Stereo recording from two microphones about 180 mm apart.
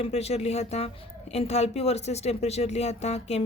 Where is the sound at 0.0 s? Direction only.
35° left (ahead or behind).